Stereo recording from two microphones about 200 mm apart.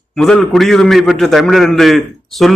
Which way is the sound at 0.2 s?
5° left (ahead or behind).